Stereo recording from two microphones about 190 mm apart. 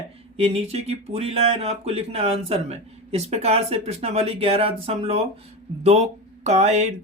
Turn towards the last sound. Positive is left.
turn(degrees=-35)  # may be behind; listen again after turning